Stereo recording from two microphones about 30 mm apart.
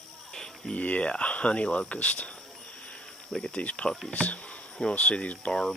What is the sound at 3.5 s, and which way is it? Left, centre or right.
Speech, left.